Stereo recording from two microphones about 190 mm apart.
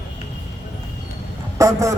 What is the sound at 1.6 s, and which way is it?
Speech, 15° right (ahead or behind).